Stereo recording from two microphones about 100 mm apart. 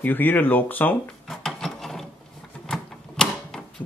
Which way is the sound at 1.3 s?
5° left (ahead or behind).